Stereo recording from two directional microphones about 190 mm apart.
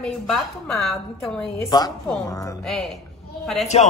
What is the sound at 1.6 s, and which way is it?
Speech, 20° left (ahead or behind).